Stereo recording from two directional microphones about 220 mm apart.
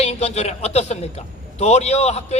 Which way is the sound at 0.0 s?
30° left (ahead or behind).